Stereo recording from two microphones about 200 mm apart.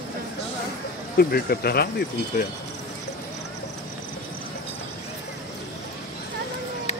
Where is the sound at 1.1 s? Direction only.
50° left (ahead or behind).